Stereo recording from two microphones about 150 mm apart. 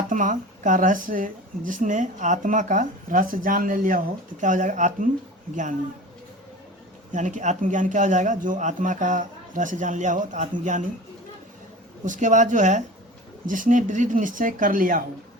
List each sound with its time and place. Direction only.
0.1 s speech: 60° right (ahead or behind)
7.1 s speech: 55° right (ahead or behind)
12.0 s speech: 55° right (ahead or behind)